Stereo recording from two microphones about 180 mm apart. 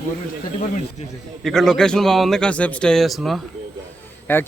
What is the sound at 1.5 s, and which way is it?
A man's voice, centre (ahead or behind).